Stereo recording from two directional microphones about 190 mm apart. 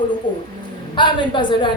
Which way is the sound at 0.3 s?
25° left (ahead or behind).